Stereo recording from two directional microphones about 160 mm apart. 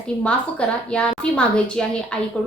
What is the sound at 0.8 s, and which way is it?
Speech, 5° left (ahead or behind).